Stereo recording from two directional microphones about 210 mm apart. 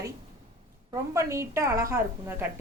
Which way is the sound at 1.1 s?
15° right (ahead or behind).